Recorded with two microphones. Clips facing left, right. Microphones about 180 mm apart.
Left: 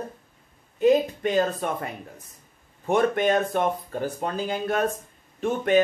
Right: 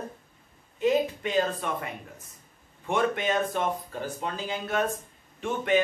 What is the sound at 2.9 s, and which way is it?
Speech, 45° left (ahead or behind).